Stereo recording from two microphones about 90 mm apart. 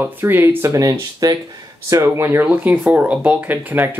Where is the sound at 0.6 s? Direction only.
40° right (ahead or behind).